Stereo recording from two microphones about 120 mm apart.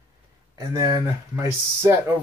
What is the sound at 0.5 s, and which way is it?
Speech, 35° right (ahead or behind).